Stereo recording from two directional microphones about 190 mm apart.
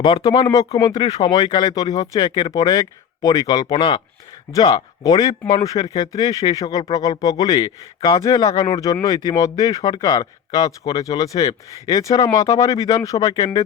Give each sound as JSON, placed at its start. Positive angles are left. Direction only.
{"t": 0.0, "sound": "speech", "side_deg": 25}